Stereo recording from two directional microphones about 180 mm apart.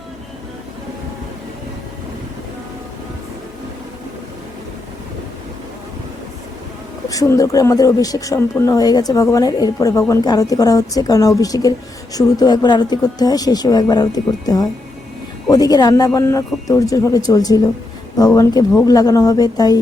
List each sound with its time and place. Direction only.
7.1 s speech: 20° left (ahead or behind)